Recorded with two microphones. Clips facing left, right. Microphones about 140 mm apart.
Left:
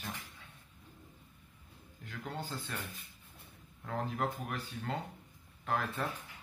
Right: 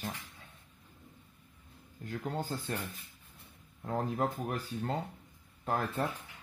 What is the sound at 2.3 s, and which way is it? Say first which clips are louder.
Speech: right 5 dB; 40° right (ahead or behind).